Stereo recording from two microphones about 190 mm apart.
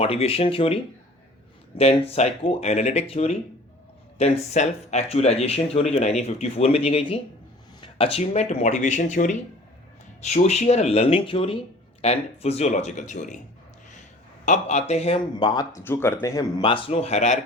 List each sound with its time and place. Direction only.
0.0 s speech: 30° left (ahead or behind)
1.8 s speech: 30° left (ahead or behind)
14.4 s speech: 40° left (ahead or behind)